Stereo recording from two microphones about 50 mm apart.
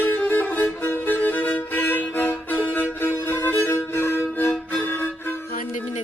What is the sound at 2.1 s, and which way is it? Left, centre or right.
Violin, left.